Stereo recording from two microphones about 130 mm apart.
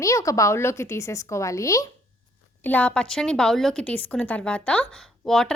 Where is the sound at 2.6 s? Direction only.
10° left (ahead or behind).